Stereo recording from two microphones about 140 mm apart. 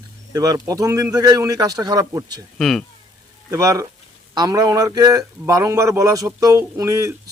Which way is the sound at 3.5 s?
25° right (ahead or behind).